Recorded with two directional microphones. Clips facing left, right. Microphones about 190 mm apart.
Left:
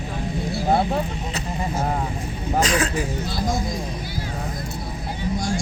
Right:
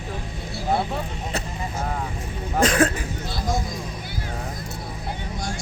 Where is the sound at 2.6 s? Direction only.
55° right (ahead or behind).